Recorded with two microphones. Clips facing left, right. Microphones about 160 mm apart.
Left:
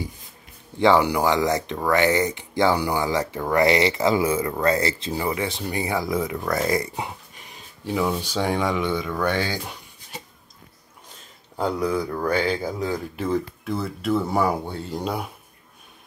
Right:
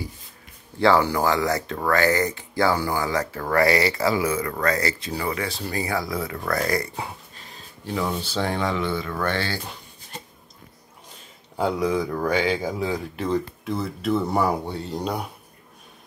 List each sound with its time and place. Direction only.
0.7 s speech: 15° left (ahead or behind)
11.5 s speech: 5° right (ahead or behind)